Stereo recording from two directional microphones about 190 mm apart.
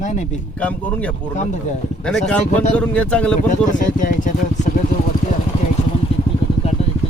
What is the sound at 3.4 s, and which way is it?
Speech, 45° left (ahead or behind).